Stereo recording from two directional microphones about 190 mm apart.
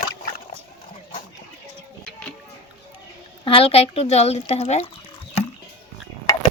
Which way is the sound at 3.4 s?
30° left (ahead or behind).